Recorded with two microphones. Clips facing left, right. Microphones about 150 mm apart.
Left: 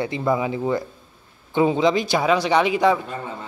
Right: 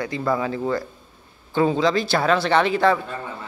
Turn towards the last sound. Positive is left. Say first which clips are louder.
# even
turn(degrees=15)  # may be behind; listen again after turning